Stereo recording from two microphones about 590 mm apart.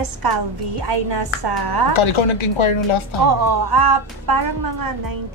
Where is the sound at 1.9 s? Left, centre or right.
Left.